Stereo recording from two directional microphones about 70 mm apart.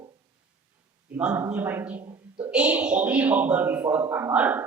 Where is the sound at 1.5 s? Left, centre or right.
Right.